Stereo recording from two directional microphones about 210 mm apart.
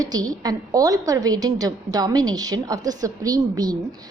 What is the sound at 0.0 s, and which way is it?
A woman's voice, 20° right (ahead or behind).